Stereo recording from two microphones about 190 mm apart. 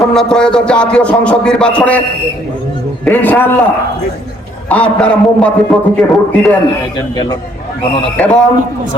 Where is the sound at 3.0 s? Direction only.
10° left (ahead or behind).